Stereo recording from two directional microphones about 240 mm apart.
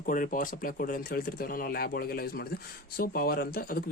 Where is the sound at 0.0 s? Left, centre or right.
Left.